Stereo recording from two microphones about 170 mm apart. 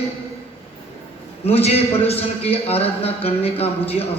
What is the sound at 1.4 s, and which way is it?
A man's voice, 35° left (ahead or behind).